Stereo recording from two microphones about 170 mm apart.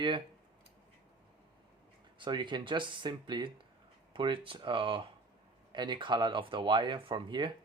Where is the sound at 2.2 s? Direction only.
30° right (ahead or behind).